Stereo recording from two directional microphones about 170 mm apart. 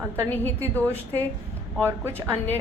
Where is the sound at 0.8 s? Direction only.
15° right (ahead or behind).